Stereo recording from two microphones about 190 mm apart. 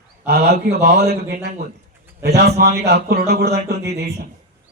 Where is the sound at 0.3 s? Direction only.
55° right (ahead or behind).